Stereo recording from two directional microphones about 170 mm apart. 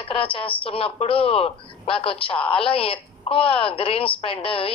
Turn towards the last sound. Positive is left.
turn(degrees=35)  # may be behind; listen again after turning